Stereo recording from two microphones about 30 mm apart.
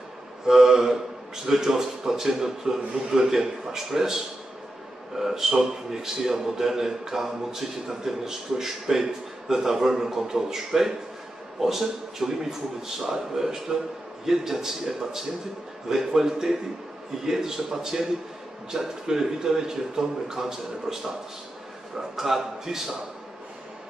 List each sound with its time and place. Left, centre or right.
0.5 s a man's voice: centre